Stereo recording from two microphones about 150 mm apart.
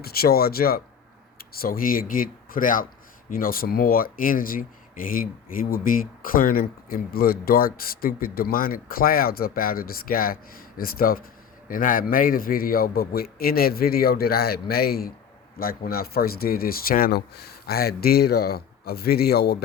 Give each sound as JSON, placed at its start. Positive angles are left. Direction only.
{"t": 0.0, "sound": "speech", "side_deg": 90}
{"t": 1.4, "sound": "a man's voice", "side_deg": 80}
{"t": 15.5, "sound": "speech", "side_deg": 75}